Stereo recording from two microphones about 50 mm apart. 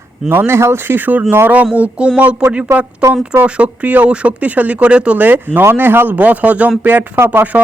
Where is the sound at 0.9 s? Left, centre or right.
Right.